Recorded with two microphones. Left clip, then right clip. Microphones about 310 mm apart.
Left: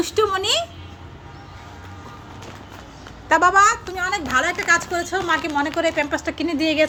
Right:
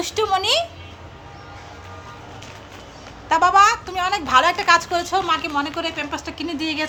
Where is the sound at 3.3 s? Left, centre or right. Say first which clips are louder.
Even; centre.